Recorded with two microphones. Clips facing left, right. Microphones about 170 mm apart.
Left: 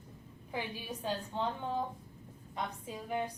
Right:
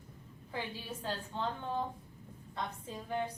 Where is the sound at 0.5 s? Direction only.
15° left (ahead or behind).